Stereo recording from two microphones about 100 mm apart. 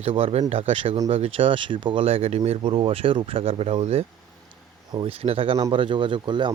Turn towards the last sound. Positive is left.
turn(degrees=-50)  # may be behind; listen again after turning